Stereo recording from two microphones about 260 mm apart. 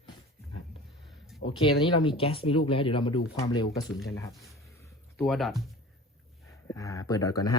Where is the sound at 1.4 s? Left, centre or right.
Centre.